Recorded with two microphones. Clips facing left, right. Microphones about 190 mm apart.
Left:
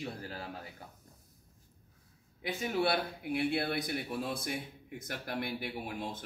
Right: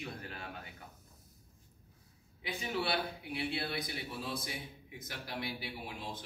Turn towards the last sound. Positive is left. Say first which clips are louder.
# left 5 dB
turn(degrees=50)  # may be behind; listen again after turning